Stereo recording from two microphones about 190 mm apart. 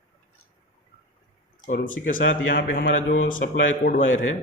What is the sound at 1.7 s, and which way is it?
Speech, 45° left (ahead or behind).